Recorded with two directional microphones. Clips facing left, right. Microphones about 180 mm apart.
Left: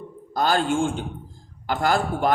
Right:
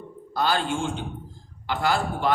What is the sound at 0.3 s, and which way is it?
A man's voice, 45° left (ahead or behind).